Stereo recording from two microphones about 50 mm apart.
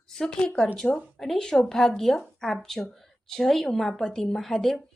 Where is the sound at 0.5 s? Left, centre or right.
Left.